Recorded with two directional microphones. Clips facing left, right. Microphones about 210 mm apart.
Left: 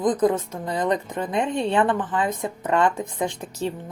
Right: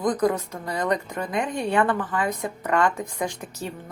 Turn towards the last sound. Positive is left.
turn(degrees=30)  # may be behind; listen again after turning